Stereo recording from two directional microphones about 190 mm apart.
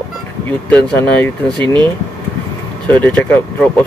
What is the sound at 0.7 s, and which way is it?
Speech, 10° left (ahead or behind).